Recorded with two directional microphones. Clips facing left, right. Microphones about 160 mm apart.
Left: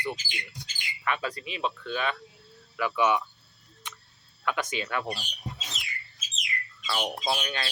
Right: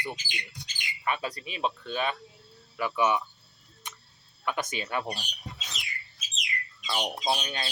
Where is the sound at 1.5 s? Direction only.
35° right (ahead or behind).